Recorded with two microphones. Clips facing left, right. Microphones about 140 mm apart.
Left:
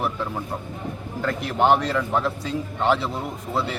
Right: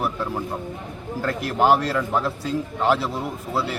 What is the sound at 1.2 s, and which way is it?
Speech, centre (ahead or behind).